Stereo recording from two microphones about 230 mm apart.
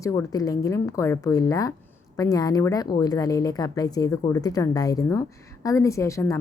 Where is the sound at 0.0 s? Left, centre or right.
Centre.